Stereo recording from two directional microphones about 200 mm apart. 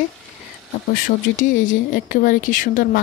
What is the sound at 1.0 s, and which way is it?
Speech, 40° left (ahead or behind).